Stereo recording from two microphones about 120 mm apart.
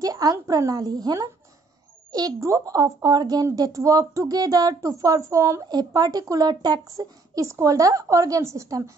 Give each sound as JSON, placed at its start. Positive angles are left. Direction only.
{"t": 0.0, "sound": "a woman's voice", "side_deg": -30}